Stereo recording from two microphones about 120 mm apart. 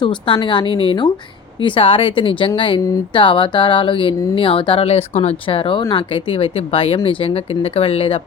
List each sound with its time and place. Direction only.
0.0 s speech: 45° left (ahead or behind)